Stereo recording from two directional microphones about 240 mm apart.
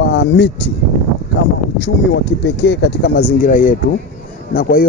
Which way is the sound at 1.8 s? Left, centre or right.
Left.